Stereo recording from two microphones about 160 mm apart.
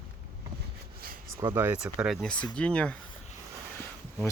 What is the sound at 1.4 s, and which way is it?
Speech, 15° right (ahead or behind).